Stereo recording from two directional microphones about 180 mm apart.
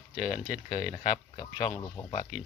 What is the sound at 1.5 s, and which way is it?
Speech, 40° left (ahead or behind).